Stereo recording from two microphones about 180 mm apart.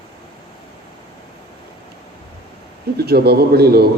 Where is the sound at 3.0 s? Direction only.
60° right (ahead or behind).